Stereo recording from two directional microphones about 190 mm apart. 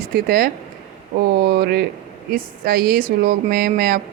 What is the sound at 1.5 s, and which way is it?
Speech, 55° right (ahead or behind).